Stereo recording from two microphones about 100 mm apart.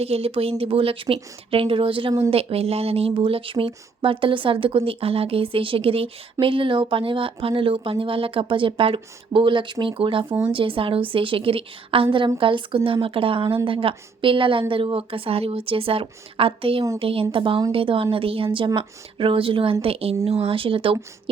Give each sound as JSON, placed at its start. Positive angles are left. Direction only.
{"t": 0.0, "sound": "speech", "side_deg": -85}
{"t": 2.3, "sound": "speech", "side_deg": -80}
{"t": 19.8, "sound": "speech", "side_deg": -75}